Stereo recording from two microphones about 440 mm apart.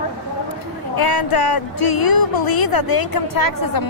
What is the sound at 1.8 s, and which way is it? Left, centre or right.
A woman's voice, left.